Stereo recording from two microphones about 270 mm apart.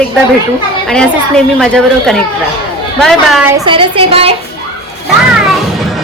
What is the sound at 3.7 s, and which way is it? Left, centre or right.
Speech, centre.